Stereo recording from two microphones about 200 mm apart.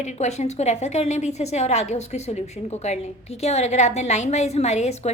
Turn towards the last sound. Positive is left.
turn(degrees=35)  # may be behind; listen again after turning